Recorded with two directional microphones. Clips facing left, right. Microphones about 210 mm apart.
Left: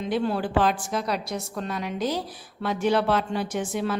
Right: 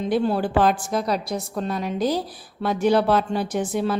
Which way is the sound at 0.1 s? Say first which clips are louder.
Right 3 dB; 40° right (ahead or behind).